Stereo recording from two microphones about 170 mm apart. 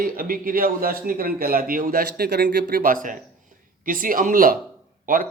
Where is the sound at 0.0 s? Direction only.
60° right (ahead or behind).